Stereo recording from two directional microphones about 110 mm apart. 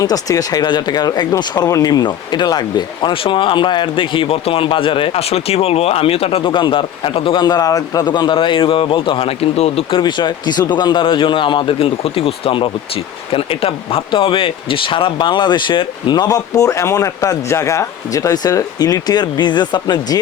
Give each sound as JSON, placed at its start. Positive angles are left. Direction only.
{"t": 0.0, "sound": "speech", "side_deg": 35}
{"t": 7.4, "sound": "speech", "side_deg": 35}
{"t": 9.9, "sound": "speech", "side_deg": 45}